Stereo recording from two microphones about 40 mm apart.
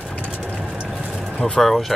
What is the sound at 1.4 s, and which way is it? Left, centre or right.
Speech, centre.